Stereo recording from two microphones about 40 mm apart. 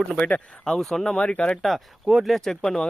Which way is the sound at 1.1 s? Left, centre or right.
Left.